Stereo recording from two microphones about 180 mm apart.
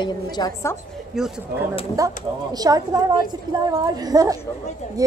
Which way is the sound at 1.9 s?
20° right (ahead or behind).